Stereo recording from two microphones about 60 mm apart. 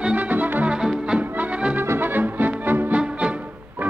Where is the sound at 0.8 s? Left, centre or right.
Centre.